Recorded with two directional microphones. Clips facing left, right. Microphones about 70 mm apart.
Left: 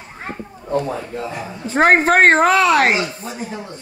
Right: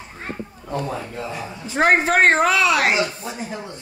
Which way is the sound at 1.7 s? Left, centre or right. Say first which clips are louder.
Left 4 dB; left.